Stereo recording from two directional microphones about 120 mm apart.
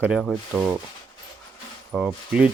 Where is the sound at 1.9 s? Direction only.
5° right (ahead or behind).